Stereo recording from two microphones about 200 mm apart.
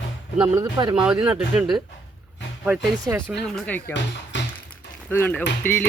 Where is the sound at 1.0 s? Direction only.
5° right (ahead or behind).